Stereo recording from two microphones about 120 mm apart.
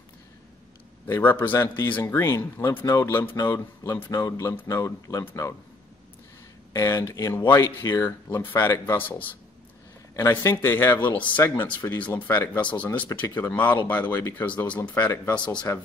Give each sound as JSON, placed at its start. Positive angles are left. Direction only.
{"t": 1.0, "sound": "a man's voice", "side_deg": 15}
{"t": 6.7, "sound": "a man's voice", "side_deg": 25}